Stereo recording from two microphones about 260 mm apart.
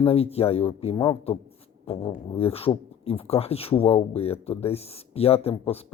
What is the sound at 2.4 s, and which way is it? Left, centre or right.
Speech, left.